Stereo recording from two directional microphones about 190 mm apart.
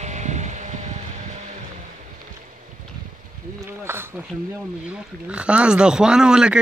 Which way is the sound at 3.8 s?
10° right (ahead or behind).